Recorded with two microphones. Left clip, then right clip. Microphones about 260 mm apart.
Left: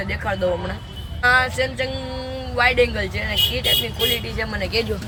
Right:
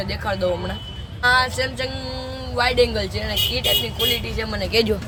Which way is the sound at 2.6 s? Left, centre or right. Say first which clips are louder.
Left 1 dB; centre.